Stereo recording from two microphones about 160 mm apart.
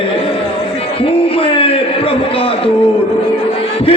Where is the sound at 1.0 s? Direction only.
35° left (ahead or behind).